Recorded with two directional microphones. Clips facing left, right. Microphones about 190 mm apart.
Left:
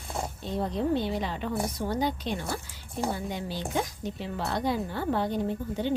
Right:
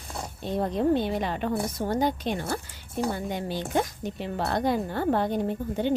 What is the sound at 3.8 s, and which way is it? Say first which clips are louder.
Speech: right 4 dB; 55° right (ahead or behind).